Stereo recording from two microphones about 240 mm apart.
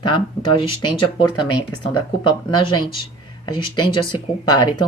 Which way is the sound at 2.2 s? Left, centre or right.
Centre.